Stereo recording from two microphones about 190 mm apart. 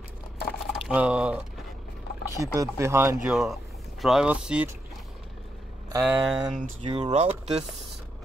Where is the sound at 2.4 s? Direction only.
15° right (ahead or behind).